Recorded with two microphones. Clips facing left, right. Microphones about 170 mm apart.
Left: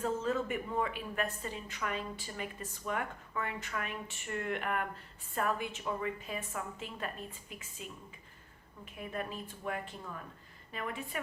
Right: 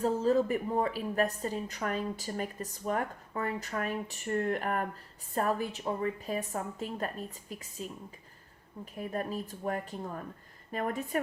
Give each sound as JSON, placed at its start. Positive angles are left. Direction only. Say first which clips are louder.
{"t": 0.0, "sound": "a woman's voice", "louder": "right 6 dB", "side_deg": -35}